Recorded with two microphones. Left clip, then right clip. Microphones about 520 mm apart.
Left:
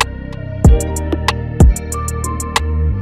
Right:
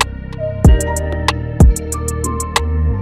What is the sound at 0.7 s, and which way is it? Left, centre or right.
Music, left.